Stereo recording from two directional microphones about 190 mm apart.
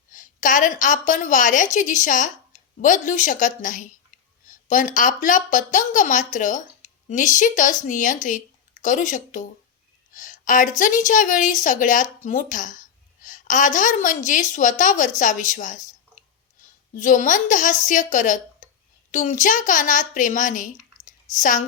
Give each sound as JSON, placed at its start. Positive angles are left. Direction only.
{"t": 0.1, "sound": "a woman's voice", "side_deg": 45}